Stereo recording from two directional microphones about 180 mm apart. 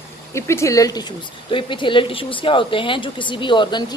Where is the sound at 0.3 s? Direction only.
15° left (ahead or behind).